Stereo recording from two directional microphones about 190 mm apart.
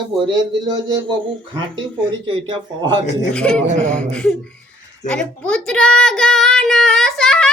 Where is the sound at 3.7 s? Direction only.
40° right (ahead or behind).